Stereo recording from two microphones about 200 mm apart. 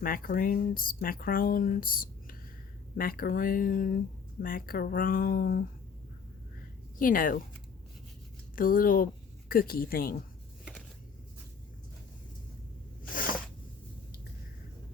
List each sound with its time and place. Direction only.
0.0 s speech: 45° left (ahead or behind)
7.0 s speech: 45° left (ahead or behind)
8.5 s speech: 45° left (ahead or behind)